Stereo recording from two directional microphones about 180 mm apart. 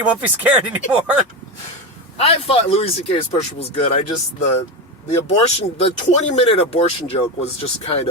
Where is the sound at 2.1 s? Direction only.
35° left (ahead or behind).